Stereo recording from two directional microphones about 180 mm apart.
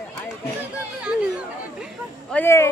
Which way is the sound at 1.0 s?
5° right (ahead or behind).